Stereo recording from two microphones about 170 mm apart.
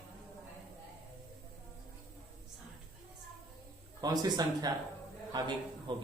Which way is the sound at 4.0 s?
20° right (ahead or behind).